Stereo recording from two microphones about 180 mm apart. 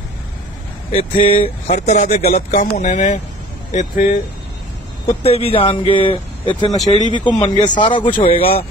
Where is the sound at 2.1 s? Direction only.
60° left (ahead or behind).